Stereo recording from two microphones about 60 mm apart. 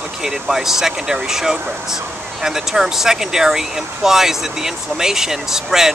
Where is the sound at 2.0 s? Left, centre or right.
Right.